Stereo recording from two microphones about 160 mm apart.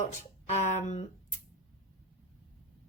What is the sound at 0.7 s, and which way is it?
Speech, 45° left (ahead or behind).